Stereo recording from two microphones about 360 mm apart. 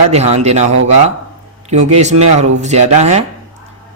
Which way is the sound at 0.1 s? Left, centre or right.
Centre.